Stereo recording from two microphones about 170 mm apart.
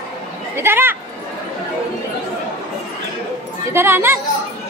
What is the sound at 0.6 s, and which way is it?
Speech, 15° right (ahead or behind).